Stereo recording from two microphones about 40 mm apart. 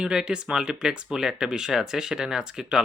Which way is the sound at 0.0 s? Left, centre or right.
Right.